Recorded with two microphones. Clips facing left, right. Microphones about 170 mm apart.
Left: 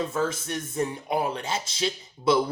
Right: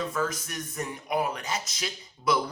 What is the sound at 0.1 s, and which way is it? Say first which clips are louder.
Speech: left 3 dB; 25° left (ahead or behind).